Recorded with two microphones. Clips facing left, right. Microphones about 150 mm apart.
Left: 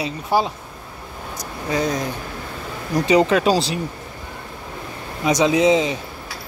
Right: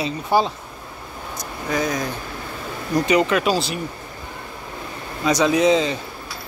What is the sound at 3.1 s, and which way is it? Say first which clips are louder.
Speech: left 4 dB; 30° left (ahead or behind).